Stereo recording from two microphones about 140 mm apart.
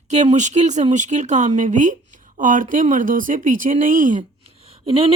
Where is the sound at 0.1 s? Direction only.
55° right (ahead or behind); by 4.2 s 70° right (ahead or behind).